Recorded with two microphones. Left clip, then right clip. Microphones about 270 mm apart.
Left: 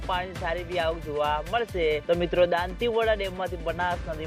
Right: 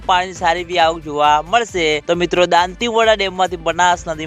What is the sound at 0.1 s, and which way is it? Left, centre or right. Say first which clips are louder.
Speech: right 14 dB; right.